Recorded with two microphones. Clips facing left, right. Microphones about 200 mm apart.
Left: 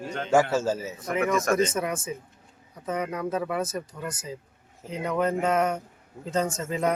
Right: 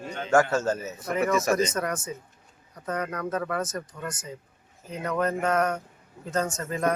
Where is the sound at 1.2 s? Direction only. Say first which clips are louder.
Even; 5° right (ahead or behind).